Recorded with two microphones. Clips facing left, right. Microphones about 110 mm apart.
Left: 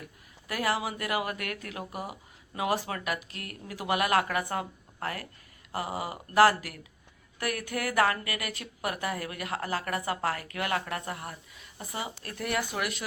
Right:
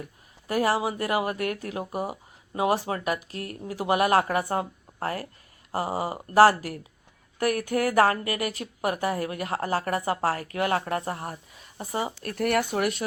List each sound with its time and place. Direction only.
0.4 s a woman's voice: 35° right (ahead or behind)
12.2 s speech: 55° right (ahead or behind)
12.7 s a woman's voice: 40° right (ahead or behind)